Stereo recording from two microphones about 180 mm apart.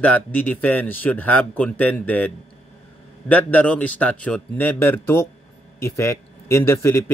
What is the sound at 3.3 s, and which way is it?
Speech, 10° left (ahead or behind).